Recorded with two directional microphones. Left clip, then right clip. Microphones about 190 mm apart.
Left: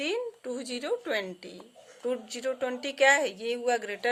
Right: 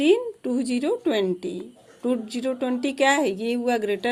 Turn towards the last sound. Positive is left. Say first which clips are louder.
# right 4 dB
turn(degrees=-10)  # may be behind; listen again after turning